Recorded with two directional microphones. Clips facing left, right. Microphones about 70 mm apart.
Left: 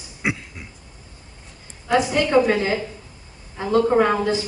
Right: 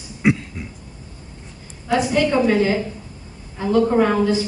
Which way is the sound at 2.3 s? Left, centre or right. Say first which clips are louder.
Left 3 dB; left.